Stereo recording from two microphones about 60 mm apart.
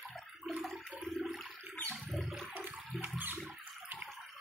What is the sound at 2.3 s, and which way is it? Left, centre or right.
Toilet flush, right.